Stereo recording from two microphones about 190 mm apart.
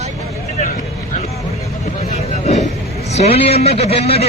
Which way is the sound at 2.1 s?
35° left (ahead or behind).